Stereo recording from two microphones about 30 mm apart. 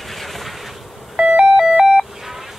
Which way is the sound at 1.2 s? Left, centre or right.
Right.